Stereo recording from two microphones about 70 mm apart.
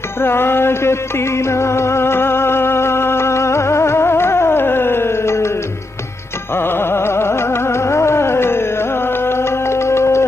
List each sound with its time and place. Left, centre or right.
0.2 s music: left
6.5 s music: left